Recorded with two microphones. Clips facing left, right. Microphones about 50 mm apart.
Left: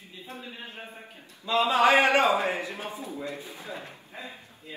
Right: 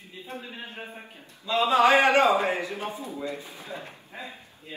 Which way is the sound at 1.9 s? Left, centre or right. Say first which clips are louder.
Right 1 dB; right.